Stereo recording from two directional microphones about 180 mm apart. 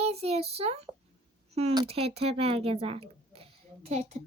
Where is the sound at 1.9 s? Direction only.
35° right (ahead or behind).